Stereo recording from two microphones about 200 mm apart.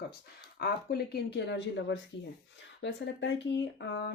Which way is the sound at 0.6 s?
50° left (ahead or behind).